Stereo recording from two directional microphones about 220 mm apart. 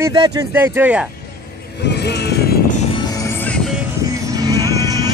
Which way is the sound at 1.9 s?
50° left (ahead or behind).